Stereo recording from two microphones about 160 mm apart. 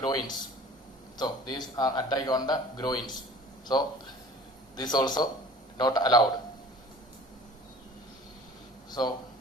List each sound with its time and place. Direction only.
0.0 s a man's voice: 25° left (ahead or behind)
4.8 s a man's voice: 25° left (ahead or behind)
8.9 s speech: 25° left (ahead or behind)